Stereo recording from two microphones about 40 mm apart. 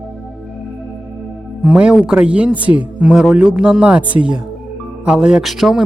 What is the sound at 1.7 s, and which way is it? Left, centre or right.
Speech, right.